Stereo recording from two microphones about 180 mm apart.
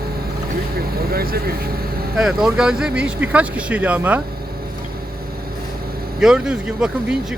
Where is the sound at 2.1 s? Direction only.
Centre (ahead or behind).